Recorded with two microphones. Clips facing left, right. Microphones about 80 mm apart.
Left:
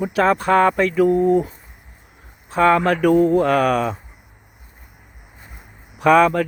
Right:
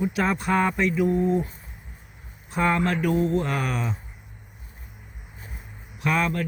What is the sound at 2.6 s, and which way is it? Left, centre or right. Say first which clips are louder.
Speech: left 8 dB; left.